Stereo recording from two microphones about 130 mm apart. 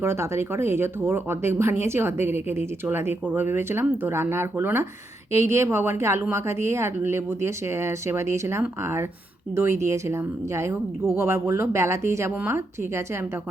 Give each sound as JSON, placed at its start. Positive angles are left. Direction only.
{"t": 0.0, "sound": "speech", "side_deg": -20}